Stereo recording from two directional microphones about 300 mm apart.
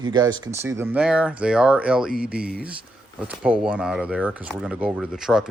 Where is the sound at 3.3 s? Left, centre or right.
Centre.